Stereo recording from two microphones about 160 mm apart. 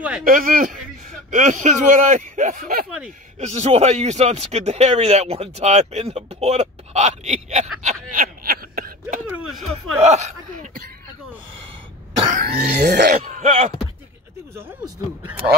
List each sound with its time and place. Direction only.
0.2 s speech: 60° right (ahead or behind)
3.3 s speech: 45° right (ahead or behind)
7.8 s speech: 65° right (ahead or behind)
9.3 s speech: centre (ahead or behind)
9.9 s speech: 45° right (ahead or behind)
12.3 s speech: 65° right (ahead or behind); by 13.2 s 90° right
13.3 s speech: 40° right (ahead or behind)